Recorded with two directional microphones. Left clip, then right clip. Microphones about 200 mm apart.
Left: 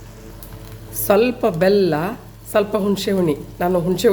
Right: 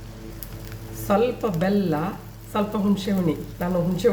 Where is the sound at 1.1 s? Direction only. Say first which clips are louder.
Left 6 dB; 55° left (ahead or behind).